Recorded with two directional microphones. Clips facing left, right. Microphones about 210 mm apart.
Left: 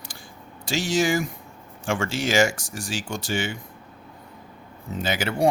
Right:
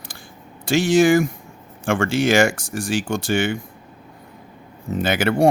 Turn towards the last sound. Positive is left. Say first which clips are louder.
# right 5 dB
turn(degrees=-60)  # may be behind; listen again after turning